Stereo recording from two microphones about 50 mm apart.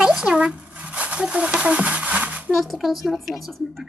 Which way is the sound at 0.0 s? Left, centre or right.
Centre.